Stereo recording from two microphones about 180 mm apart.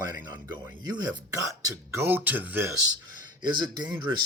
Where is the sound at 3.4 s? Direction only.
25° right (ahead or behind).